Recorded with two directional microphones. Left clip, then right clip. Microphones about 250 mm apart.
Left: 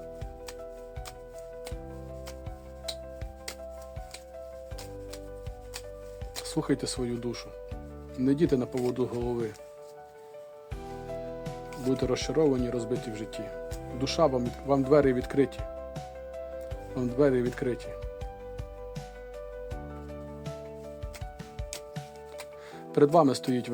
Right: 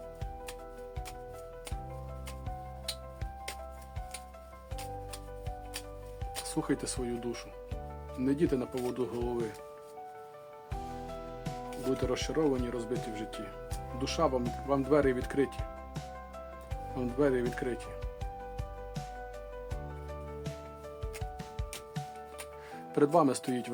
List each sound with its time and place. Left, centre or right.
6.4 s speech: centre
11.9 s speech: centre
16.9 s speech: centre
23.0 s speech: centre